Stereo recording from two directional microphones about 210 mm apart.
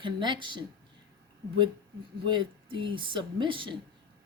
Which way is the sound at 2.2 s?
25° right (ahead or behind).